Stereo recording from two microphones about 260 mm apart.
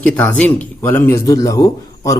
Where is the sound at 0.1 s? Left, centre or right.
Centre.